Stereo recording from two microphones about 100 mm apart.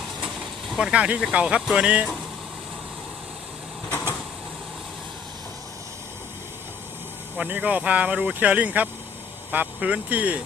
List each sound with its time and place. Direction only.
0.7 s speech: 5° right (ahead or behind)
7.3 s speech: 15° right (ahead or behind)